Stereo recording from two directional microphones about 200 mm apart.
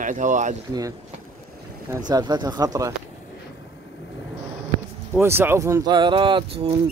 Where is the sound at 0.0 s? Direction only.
40° right (ahead or behind).